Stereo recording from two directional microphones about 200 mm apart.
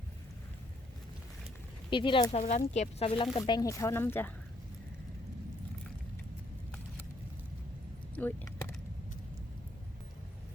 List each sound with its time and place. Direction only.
1.9 s speech: 25° left (ahead or behind)
2.4 s speech: 40° left (ahead or behind); by 4.3 s 10° left (ahead or behind)
8.1 s keys jangling: 10° left (ahead or behind)